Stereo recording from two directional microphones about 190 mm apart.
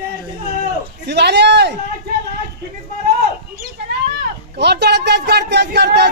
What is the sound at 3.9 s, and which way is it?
Speech, 60° right (ahead or behind).